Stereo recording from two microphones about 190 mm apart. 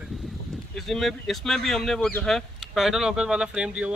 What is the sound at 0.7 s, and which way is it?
Speech, centre (ahead or behind).